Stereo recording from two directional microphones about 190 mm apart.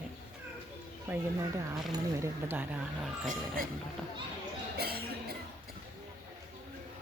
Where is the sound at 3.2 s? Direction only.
50° right (ahead or behind).